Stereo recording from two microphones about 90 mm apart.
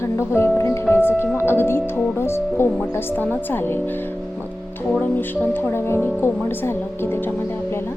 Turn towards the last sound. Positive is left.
turn(degrees=25)  # may be behind; listen again after turning